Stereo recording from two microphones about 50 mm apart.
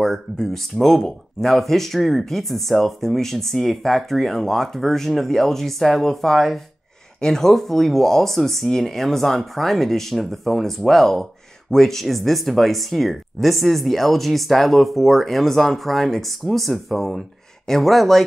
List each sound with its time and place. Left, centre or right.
0.0 s speech: centre